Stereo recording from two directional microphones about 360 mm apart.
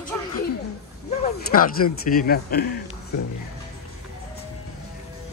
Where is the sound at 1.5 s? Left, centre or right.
Left.